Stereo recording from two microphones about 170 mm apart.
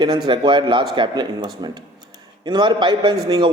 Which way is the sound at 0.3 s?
30° right (ahead or behind).